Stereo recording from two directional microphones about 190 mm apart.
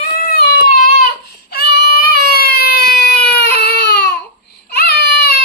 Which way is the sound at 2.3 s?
55° left (ahead or behind).